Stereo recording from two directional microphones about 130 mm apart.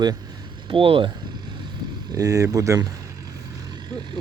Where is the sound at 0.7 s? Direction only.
40° right (ahead or behind).